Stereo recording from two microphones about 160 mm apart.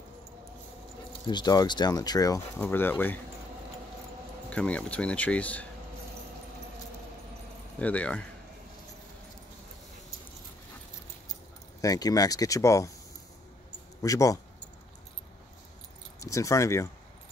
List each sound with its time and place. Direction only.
1.2 s speech: 25° left (ahead or behind)
4.5 s speech: 10° left (ahead or behind)
7.8 s speech: 10° left (ahead or behind)
11.8 s speech: 20° left (ahead or behind)
14.0 s speech: 20° left (ahead or behind)
16.2 s speech: 20° left (ahead or behind)